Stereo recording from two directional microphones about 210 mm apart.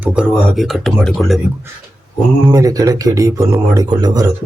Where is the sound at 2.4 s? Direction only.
15° right (ahead or behind).